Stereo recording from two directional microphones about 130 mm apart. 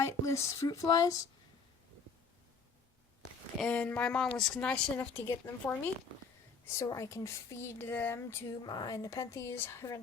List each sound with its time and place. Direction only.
0.0 s speech: 20° left (ahead or behind)
3.6 s a woman's voice: 10° left (ahead or behind)
4.9 s a woman's voice: 15° left (ahead or behind)
8.6 s speech: 30° left (ahead or behind)